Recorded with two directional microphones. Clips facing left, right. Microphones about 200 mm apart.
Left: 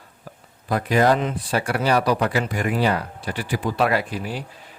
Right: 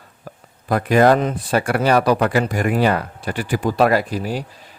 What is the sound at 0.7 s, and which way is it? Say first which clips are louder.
Speech: right 4 dB; 55° right (ahead or behind).